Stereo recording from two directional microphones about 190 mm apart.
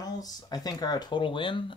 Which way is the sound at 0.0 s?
20° left (ahead or behind).